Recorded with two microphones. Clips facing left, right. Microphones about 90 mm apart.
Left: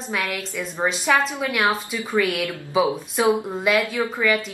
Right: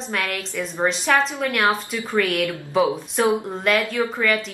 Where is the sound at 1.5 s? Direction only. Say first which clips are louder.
Right 1 dB; centre (ahead or behind).